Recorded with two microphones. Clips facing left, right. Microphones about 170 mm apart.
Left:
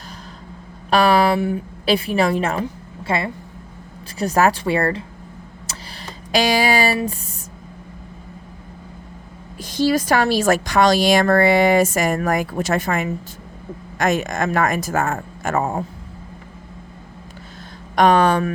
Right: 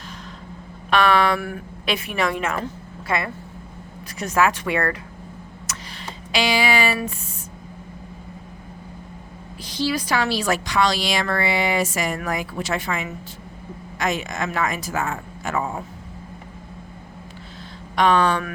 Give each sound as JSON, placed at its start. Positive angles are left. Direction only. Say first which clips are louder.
{"t": 0.9, "sound": "speech", "louder": "left 3 dB", "side_deg": 35}
{"t": 1.4, "sound": "speech", "louder": "left 9 dB", "side_deg": 25}
{"t": 1.8, "sound": "a woman's voice", "louder": "left 6 dB", "side_deg": 35}
{"t": 5.7, "sound": "a sound", "louder": "right 1 dB", "side_deg": 30}
{"t": 6.3, "sound": "speech", "louder": "left 4 dB", "side_deg": 45}
{"t": 9.6, "sound": "a woman's voice", "louder": "left 6 dB", "side_deg": 45}
{"t": 17.9, "sound": "a woman's voice", "louder": "left 4 dB", "side_deg": 45}